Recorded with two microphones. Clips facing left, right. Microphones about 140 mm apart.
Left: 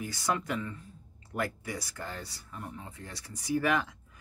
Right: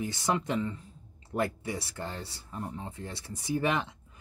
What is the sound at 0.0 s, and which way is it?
Speech, 25° right (ahead or behind).